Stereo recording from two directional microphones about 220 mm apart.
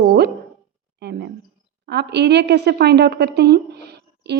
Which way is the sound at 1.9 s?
50° right (ahead or behind).